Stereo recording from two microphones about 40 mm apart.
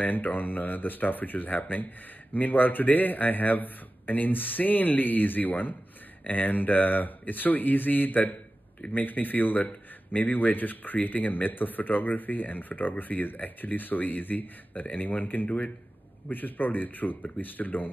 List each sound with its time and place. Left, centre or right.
0.0 s speech: left
14.7 s speech: left